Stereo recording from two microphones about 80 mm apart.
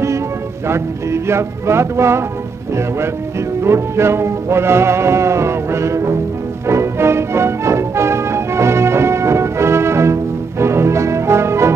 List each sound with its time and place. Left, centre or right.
0.7 s music: right